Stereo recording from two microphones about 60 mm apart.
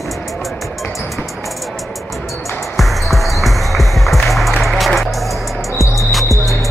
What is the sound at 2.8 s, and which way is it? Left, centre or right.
Music, centre.